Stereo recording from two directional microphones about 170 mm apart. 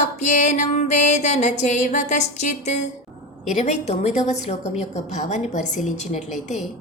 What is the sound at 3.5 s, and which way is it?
A woman's voice, 40° left (ahead or behind).